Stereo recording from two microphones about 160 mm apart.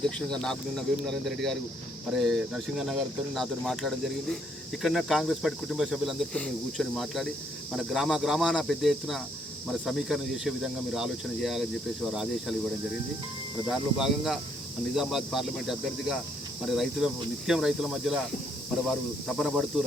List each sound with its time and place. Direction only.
0.3 s cricket: 5° left (ahead or behind)
13.7 s cricket: centre (ahead or behind)
19.4 s cricket: centre (ahead or behind)